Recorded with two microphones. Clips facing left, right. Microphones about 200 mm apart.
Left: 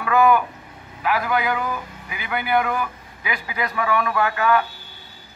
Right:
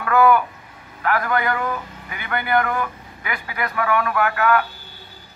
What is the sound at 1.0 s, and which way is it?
A man's voice, 10° left (ahead or behind).